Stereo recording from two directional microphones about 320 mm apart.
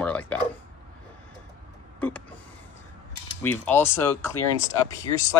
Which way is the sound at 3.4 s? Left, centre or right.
Centre.